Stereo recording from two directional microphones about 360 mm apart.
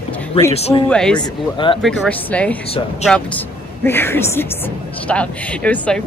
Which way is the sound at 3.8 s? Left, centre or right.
Centre.